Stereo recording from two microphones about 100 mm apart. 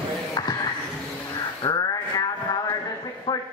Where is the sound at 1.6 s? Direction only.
35° left (ahead or behind).